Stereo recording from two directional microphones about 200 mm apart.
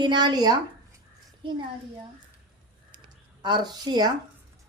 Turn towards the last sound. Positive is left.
turn(degrees=-20)  # may be behind; listen again after turning